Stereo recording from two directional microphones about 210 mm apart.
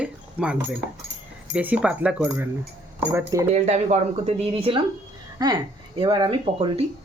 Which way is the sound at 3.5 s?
30° right (ahead or behind).